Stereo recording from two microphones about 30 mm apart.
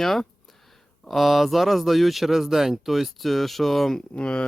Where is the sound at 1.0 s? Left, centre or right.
Centre.